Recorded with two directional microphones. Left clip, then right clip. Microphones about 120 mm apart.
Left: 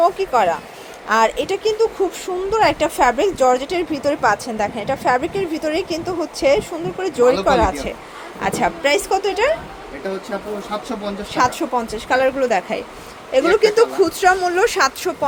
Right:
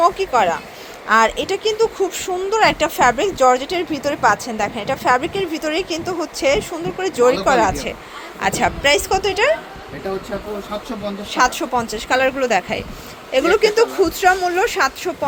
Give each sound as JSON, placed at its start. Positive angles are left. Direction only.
{"t": 0.0, "sound": "speech", "side_deg": 10}
{"t": 11.3, "sound": "speech", "side_deg": 5}